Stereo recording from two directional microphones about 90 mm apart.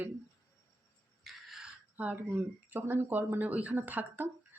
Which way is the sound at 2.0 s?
20° right (ahead or behind).